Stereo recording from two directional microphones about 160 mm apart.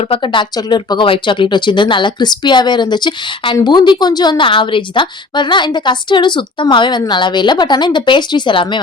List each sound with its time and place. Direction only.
0.1 s speech: 30° left (ahead or behind)